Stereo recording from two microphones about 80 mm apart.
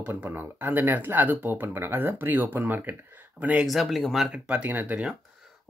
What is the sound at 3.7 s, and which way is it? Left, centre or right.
Speech, centre.